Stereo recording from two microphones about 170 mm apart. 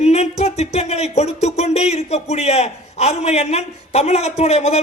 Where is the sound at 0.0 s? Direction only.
40° left (ahead or behind).